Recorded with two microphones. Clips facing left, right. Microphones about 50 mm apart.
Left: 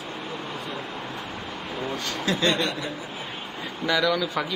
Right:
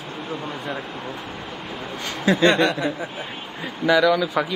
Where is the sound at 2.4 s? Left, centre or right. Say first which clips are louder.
Right 8 dB; right.